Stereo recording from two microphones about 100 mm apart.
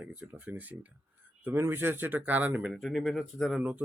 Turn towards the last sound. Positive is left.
turn(degrees=0)  # may be behind; listen again after turning